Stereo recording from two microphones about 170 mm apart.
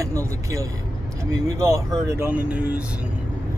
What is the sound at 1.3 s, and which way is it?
Speech, 20° right (ahead or behind).